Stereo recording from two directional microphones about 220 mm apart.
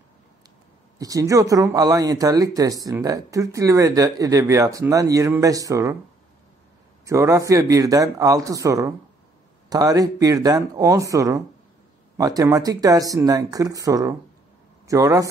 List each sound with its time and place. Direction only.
0.9 s speech: 15° right (ahead or behind)
7.1 s speech: 15° right (ahead or behind)